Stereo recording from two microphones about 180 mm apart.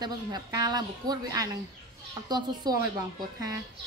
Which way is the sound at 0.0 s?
20° right (ahead or behind).